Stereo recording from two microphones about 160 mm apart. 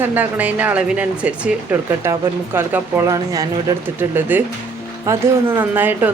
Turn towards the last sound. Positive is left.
turn(degrees=-10)  # may be behind; listen again after turning